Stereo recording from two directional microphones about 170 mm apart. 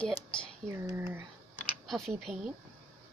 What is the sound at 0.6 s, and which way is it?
Speech, 15° right (ahead or behind).